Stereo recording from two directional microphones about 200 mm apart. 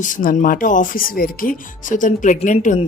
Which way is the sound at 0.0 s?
40° left (ahead or behind).